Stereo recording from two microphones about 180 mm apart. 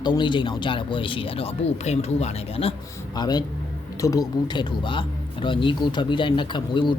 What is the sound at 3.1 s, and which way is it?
Speech, 25° left (ahead or behind).